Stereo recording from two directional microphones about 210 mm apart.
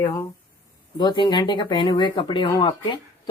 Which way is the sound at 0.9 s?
20° left (ahead or behind).